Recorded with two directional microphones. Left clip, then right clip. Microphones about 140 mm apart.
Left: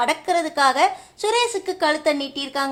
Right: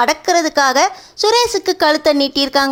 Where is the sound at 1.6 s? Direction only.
55° right (ahead or behind).